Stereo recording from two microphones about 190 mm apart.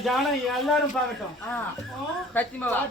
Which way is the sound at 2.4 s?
10° left (ahead or behind).